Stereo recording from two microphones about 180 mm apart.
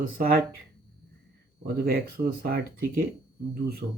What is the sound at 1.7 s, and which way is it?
Speech, 60° right (ahead or behind).